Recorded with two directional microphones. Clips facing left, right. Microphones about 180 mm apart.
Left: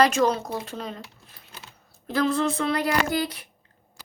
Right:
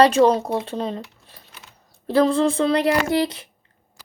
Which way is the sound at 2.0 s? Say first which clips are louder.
Right 6 dB; 30° right (ahead or behind).